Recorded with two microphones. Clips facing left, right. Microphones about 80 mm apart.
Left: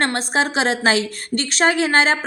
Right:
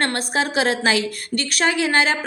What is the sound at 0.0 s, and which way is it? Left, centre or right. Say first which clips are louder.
A woman's voice: left 2 dB; left.